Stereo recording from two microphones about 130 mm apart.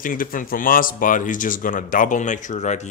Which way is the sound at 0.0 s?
90° left.